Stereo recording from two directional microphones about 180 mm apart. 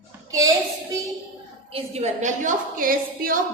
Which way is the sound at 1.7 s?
35° right (ahead or behind).